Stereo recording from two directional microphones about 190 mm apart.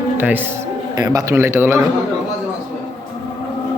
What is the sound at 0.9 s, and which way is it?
Speech, 20° right (ahead or behind).